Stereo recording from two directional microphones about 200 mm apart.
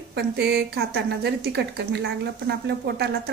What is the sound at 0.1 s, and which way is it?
Speech, 55° right (ahead or behind).